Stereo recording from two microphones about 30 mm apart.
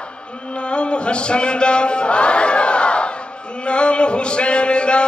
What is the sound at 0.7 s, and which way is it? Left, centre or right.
Chant, left.